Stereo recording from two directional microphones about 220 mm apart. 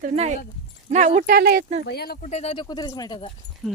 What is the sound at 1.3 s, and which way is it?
Speech, 45° right (ahead or behind).